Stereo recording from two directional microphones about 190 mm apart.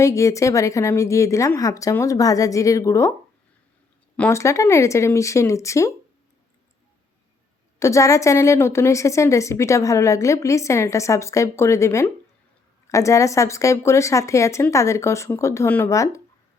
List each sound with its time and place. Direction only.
0.0 s a woman's voice: 15° left (ahead or behind)
4.2 s a woman's voice: 15° left (ahead or behind)
7.8 s a woman's voice: 15° left (ahead or behind)